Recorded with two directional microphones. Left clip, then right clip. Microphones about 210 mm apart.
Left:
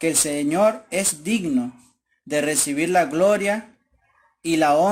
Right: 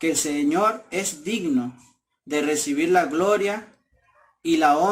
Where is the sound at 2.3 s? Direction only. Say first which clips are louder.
Left 1 dB; 40° left (ahead or behind).